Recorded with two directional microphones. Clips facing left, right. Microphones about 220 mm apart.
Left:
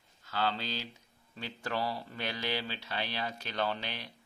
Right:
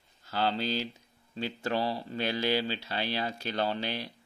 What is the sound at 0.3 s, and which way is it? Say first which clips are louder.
Speech: right 4 dB; 35° right (ahead or behind).